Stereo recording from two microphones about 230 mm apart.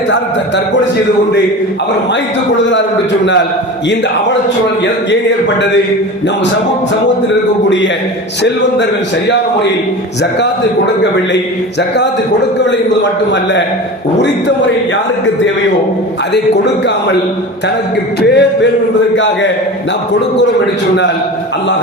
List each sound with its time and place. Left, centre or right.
0.1 s a man's voice: left
13.3 s a man's voice: left
16.3 s a man's voice: left
18.2 s a man's voice: left